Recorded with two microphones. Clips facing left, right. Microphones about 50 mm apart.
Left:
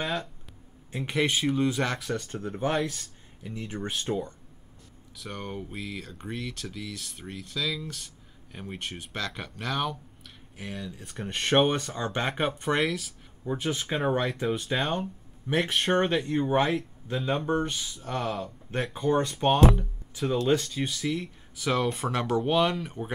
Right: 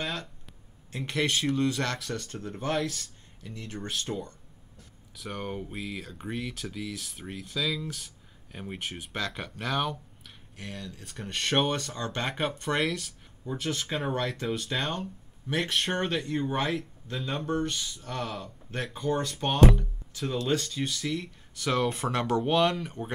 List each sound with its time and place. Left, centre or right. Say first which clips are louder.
0.0 s a sound: left 3 dB; centre
0.9 s speech: left 2 dB; centre
5.1 s speech: right 1 dB; centre
13.5 s speech: left 2 dB; centre